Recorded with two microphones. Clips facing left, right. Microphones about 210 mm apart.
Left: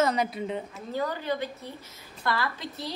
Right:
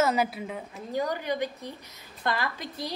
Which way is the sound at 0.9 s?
15° right (ahead or behind).